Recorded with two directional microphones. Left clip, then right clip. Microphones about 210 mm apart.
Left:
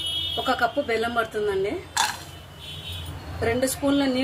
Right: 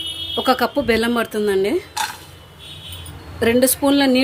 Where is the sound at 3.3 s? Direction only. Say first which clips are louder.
Right 8 dB; 45° right (ahead or behind).